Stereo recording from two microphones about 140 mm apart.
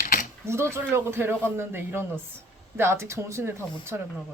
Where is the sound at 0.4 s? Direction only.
20° right (ahead or behind).